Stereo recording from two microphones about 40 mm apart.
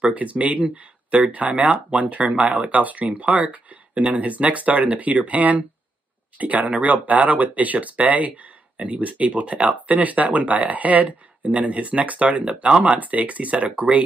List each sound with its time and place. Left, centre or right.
0.1 s speech: right
13.0 s speech: right